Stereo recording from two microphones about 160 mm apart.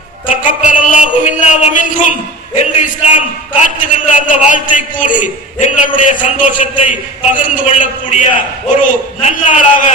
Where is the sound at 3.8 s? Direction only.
55° left (ahead or behind).